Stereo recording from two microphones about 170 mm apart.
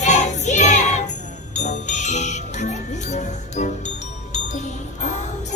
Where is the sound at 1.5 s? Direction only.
45° left (ahead or behind).